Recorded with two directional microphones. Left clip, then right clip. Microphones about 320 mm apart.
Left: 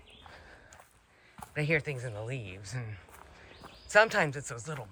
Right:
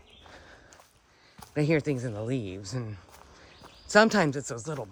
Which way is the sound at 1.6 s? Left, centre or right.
Centre.